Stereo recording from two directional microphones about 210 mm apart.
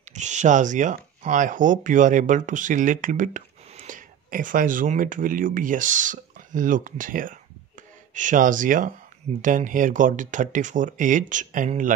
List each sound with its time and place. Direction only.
0.1 s speech: 35° right (ahead or behind)